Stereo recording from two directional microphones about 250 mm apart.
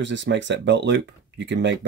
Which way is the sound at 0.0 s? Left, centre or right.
Right.